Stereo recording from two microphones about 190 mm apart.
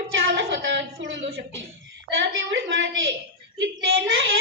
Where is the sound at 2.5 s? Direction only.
80° right.